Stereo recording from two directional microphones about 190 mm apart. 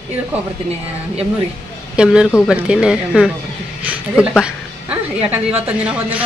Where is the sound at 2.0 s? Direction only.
5° right (ahead or behind).